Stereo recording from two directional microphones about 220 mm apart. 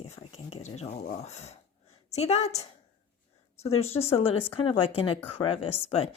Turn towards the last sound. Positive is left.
turn(degrees=30)  # may be behind; listen again after turning